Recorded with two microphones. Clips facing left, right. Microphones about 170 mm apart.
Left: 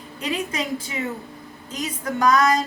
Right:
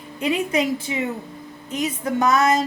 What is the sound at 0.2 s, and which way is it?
A woman's voice, 25° right (ahead or behind).